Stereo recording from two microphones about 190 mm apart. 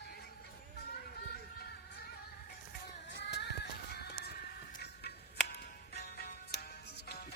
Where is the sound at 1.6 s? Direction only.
55° left (ahead or behind).